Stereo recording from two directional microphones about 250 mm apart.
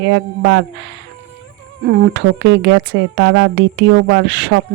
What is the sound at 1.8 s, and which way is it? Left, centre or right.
A woman's voice, right.